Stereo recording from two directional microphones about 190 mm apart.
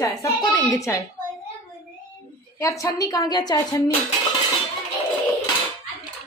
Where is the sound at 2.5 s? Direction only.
15° left (ahead or behind).